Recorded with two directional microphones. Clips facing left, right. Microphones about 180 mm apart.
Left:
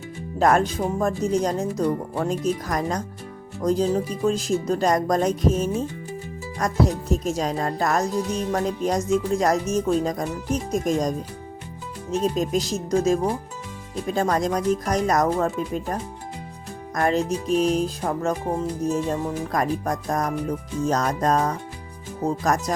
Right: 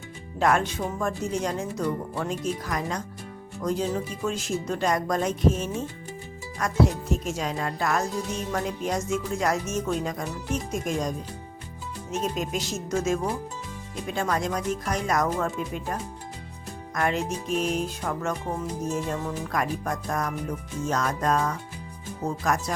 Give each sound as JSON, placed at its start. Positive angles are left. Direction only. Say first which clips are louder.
{"t": 0.3, "sound": "speech", "louder": "left 4 dB", "side_deg": 40}
{"t": 12.1, "sound": "speech", "louder": "left 6 dB", "side_deg": 35}